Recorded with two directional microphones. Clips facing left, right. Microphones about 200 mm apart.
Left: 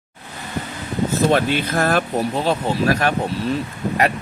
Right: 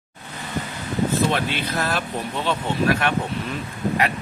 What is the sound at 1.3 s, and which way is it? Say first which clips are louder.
Speech: left 6 dB; 50° left (ahead or behind).